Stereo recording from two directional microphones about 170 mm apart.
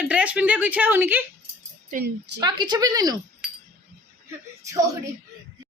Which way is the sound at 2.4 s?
25° right (ahead or behind).